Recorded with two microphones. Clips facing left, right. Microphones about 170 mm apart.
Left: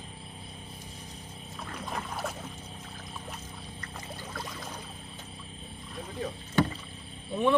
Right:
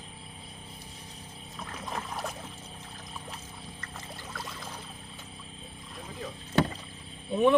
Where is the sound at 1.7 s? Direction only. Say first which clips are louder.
Even; centre (ahead or behind).